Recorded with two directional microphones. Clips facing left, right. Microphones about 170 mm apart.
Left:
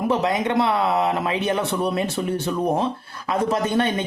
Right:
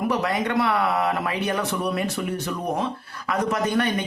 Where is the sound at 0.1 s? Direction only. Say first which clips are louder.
Left 3 dB; 20° left (ahead or behind).